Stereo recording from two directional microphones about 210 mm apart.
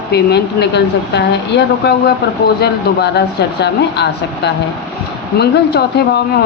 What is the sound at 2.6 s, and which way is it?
Speech, 50° left (ahead or behind).